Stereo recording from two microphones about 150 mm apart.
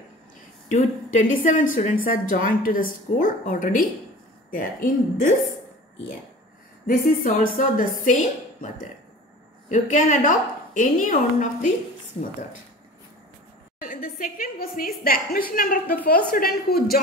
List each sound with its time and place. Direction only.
0.7 s a woman's voice: 55° left (ahead or behind)
6.9 s a woman's voice: 65° left (ahead or behind)
13.7 s a woman's voice: 75° left (ahead or behind)
15.5 s a woman's voice: 70° left (ahead or behind)
16.3 s speech: 80° left